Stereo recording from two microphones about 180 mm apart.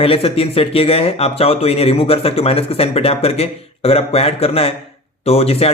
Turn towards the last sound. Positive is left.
turn(degrees=35)  # may be behind; listen again after turning